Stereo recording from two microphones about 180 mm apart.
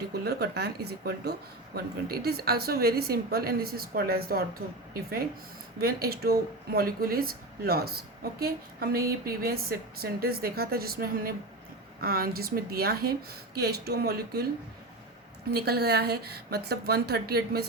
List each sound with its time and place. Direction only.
0.1 s speech: 65° right (ahead or behind)
5.8 s speech: 60° right (ahead or behind)
15.5 s speech: 60° right (ahead or behind)